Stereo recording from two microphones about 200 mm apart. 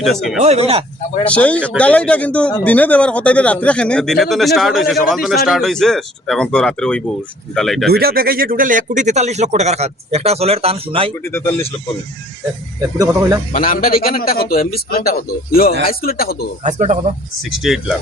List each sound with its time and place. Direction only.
0.0 s speech: centre (ahead or behind)
0.4 s speech: 30° right (ahead or behind)
1.3 s speech: 5° left (ahead or behind)
7.9 s speech: 50° right (ahead or behind); by 11.1 s 30° right (ahead or behind)
11.3 s speech: 10° left (ahead or behind)
13.5 s a man's voice: 45° left (ahead or behind)
16.6 s speech: 35° right (ahead or behind)
17.5 s speech: centre (ahead or behind)